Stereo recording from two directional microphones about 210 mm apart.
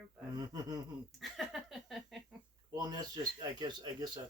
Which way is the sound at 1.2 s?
Centre (ahead or behind).